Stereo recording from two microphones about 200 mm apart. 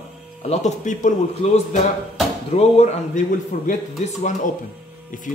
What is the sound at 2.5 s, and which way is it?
Speech, 35° left (ahead or behind).